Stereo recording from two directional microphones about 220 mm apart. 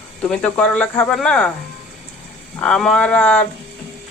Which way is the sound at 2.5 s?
5° left (ahead or behind).